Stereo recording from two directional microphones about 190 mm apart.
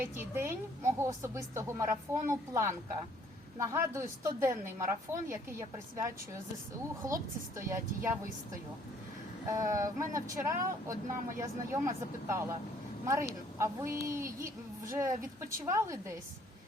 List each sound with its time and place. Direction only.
0.3 s a woman's voice: 15° right (ahead or behind)
9.5 s a woman's voice: 15° right (ahead or behind)